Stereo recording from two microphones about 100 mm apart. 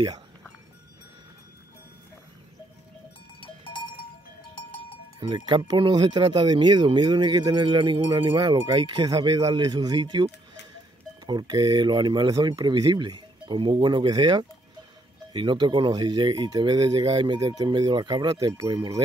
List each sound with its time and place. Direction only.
3.3 s cowbell: 60° left (ahead or behind)
5.2 s speech: 50° right (ahead or behind)
8.6 s speech: 45° right (ahead or behind)
11.2 s speech: 45° right (ahead or behind)
18.3 s speech: 35° right (ahead or behind)